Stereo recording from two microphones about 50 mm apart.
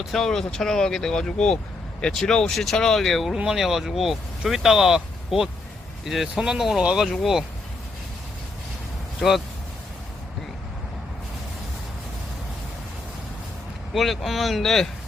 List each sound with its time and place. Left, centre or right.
0.0 s speech: centre
3.3 s speech: centre
9.2 s speech: centre
13.9 s speech: centre